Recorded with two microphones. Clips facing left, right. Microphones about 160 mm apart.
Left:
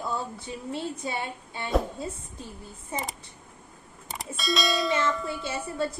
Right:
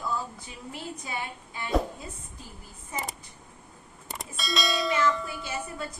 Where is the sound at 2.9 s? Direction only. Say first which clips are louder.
Left 2 dB; 30° left (ahead or behind).